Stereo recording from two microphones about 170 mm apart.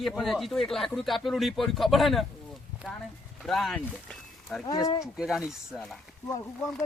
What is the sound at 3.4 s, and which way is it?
Speech, centre (ahead or behind).